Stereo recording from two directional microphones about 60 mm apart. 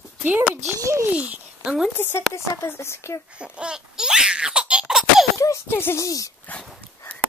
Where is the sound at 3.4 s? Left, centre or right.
Centre.